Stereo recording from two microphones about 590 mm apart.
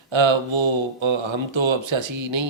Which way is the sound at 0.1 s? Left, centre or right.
Right.